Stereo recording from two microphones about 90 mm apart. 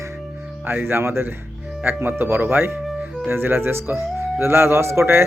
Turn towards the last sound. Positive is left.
turn(degrees=-30)  # may be behind; listen again after turning